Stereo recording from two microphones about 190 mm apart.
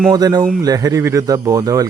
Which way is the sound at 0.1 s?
20° right (ahead or behind).